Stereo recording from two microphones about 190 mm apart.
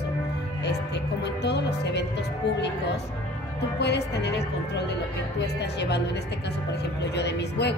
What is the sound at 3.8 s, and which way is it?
A woman's voice, 60° left (ahead or behind).